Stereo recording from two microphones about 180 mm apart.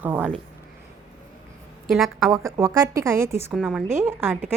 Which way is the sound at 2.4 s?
15° right (ahead or behind).